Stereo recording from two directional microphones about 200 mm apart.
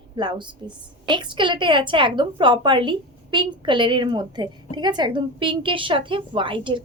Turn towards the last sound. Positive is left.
turn(degrees=-25)  # may be behind; listen again after turning